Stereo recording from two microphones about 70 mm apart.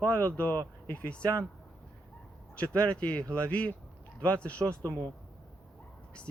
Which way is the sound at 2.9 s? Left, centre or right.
Centre.